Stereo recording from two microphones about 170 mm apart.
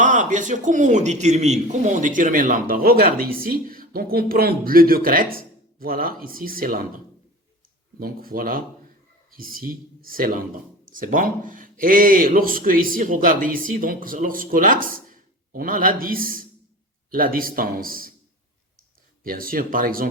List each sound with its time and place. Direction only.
0.0 s a man's voice: 50° right (ahead or behind)
19.2 s speech: 55° right (ahead or behind)